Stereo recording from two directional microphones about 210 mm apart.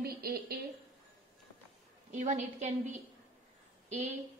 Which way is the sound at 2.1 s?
35° right (ahead or behind).